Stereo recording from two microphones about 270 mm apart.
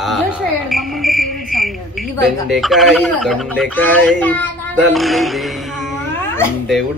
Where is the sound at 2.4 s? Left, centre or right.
Centre.